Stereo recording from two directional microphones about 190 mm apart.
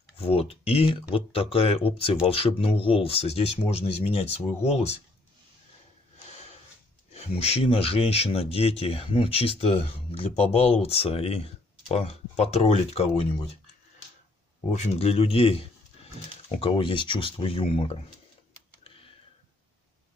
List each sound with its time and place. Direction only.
0.2 s speech: 30° left (ahead or behind)
7.1 s speech: 35° left (ahead or behind)
14.7 s speech: 35° left (ahead or behind)
18.9 s tick: 30° left (ahead or behind)